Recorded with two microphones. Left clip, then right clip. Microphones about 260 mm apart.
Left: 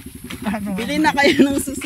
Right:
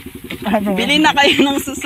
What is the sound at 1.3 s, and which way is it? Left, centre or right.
Speech, centre.